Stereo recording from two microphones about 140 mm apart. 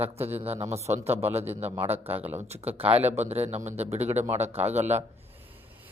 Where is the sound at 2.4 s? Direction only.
50° right (ahead or behind).